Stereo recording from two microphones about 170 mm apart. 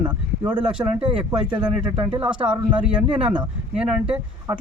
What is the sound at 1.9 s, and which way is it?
Speech, 30° right (ahead or behind).